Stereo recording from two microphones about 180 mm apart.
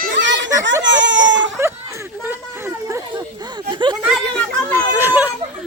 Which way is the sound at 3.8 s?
25° right (ahead or behind).